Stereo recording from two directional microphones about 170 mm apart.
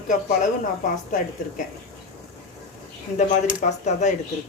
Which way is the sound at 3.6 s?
45° left (ahead or behind).